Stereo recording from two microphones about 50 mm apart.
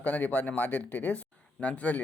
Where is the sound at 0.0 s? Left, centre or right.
Left.